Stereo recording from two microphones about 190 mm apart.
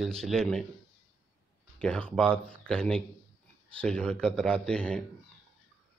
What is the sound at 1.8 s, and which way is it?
Speech, 5° left (ahead or behind).